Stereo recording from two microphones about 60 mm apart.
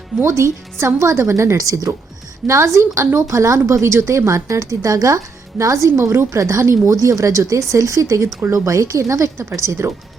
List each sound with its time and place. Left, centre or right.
0.2 s a woman's voice: right
2.5 s a woman's voice: right